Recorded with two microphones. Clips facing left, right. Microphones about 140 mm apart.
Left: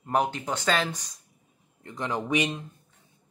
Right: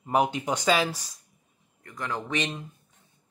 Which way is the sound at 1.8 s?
20° left (ahead or behind).